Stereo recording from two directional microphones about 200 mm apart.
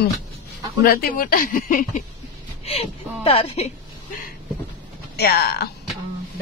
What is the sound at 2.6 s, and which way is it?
Speech, 30° left (ahead or behind).